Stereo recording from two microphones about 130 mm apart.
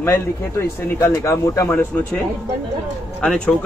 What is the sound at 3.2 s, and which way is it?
Speech, 5° left (ahead or behind).